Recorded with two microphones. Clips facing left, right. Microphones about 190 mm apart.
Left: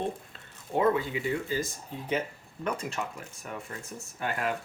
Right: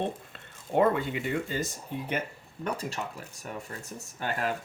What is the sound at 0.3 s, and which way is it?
Speech, 60° right (ahead or behind).